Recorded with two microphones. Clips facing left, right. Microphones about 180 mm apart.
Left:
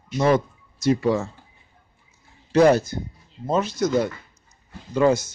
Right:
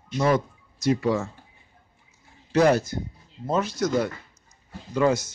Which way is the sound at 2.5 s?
30° left (ahead or behind).